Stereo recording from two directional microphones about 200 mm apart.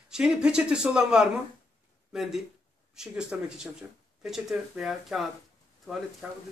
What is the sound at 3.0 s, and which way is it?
Speech, 5° right (ahead or behind).